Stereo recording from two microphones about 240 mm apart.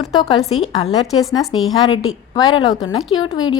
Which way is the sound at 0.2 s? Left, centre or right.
Left.